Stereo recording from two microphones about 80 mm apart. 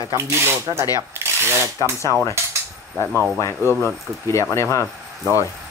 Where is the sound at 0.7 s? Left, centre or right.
Right.